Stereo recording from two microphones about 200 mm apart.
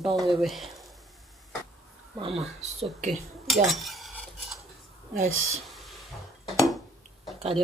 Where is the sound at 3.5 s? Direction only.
Centre (ahead or behind).